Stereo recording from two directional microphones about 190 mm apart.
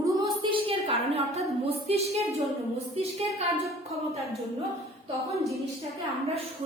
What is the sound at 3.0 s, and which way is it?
Speech, 35° right (ahead or behind).